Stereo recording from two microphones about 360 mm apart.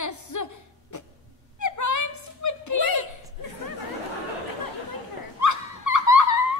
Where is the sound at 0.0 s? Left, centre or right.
Left.